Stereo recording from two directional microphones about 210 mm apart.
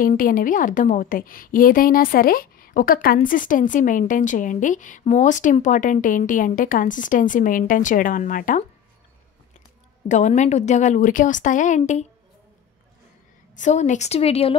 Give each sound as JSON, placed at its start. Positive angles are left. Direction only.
{"t": 0.0, "sound": "a woman's voice", "side_deg": 40}
{"t": 10.0, "sound": "a woman's voice", "side_deg": 35}
{"t": 13.6, "sound": "a woman's voice", "side_deg": 35}